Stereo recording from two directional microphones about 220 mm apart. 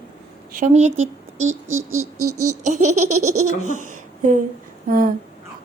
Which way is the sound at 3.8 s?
35° right (ahead or behind).